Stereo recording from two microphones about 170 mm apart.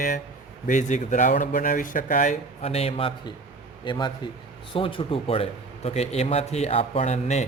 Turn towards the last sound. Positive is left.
turn(degrees=40)  # may be behind; listen again after turning